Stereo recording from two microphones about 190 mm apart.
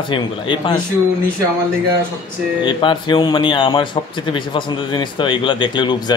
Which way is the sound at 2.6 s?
25° left (ahead or behind).